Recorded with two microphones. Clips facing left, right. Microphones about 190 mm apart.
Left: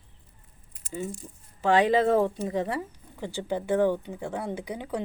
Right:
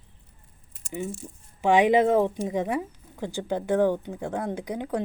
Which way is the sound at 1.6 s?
15° right (ahead or behind).